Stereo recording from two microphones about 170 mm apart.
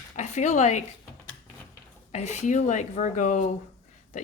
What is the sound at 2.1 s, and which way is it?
Speech, 40° left (ahead or behind).